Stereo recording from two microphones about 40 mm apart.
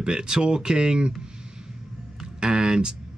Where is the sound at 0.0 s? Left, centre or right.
Centre.